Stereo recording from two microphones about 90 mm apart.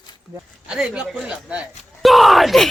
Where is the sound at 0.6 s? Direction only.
10° right (ahead or behind).